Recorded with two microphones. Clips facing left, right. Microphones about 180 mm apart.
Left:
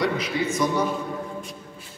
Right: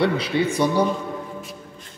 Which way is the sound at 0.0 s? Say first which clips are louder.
Right 4 dB; 30° right (ahead or behind).